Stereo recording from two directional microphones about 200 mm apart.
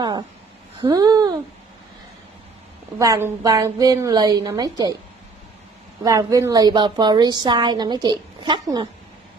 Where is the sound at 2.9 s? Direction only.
15° right (ahead or behind).